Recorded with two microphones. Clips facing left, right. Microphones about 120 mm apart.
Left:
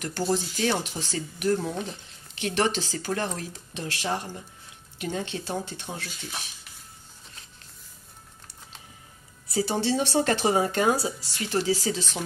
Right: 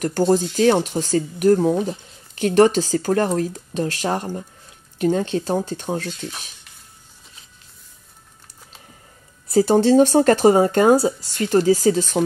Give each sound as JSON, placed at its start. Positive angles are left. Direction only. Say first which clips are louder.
{"t": 0.0, "sound": "speech", "louder": "right 9 dB", "side_deg": -45}
{"t": 9.5, "sound": "speech", "louder": "right 11 dB", "side_deg": -50}